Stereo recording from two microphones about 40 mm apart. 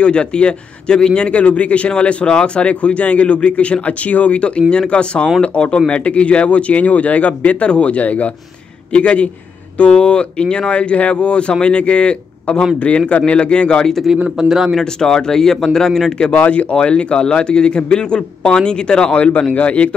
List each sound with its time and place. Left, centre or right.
0.0 s a man's voice: left
14.4 s a man's voice: centre
14.8 s a man's voice: centre
16.3 s a man's voice: left
19.1 s speech: left